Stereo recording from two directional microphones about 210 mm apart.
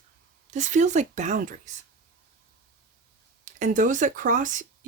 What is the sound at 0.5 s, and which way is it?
Speech, 35° right (ahead or behind).